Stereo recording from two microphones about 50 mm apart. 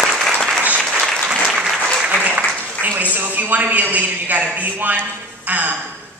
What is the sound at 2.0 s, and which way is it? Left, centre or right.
Applause, right.